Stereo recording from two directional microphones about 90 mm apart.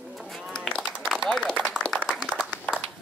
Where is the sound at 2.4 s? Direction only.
5° left (ahead or behind).